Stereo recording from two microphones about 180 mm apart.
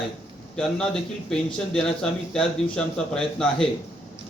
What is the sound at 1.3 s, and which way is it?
A man's voice, 5° left (ahead or behind).